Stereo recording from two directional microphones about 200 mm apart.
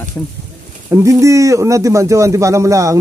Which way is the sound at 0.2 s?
10° left (ahead or behind).